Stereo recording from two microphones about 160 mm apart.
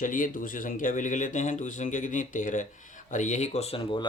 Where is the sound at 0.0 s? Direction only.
55° left (ahead or behind).